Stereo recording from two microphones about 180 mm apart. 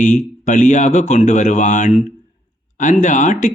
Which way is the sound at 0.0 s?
45° left (ahead or behind).